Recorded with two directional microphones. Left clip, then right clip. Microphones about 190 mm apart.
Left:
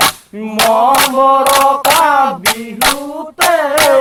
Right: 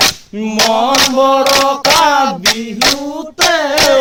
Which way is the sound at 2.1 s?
45° right (ahead or behind).